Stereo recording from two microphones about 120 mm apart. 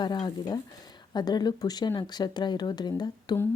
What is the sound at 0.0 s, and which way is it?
Speech, 40° left (ahead or behind).